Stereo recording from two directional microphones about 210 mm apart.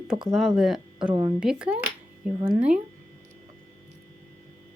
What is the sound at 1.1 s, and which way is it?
Speech, 15° right (ahead or behind).